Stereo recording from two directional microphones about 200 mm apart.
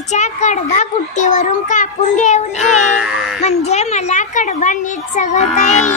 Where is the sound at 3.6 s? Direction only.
35° left (ahead or behind).